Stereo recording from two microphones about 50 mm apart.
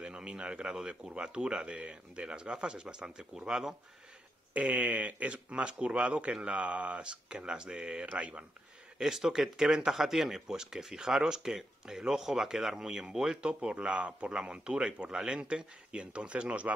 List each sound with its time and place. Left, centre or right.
0.0 s speech: centre
4.6 s speech: right
9.0 s speech: centre; by 16.7 s right